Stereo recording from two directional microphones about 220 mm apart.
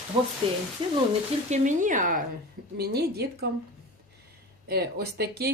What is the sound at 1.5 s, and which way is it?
Speech, 35° right (ahead or behind).